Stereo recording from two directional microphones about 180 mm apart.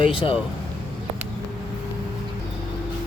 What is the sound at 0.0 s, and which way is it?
Mantra, 30° left (ahead or behind).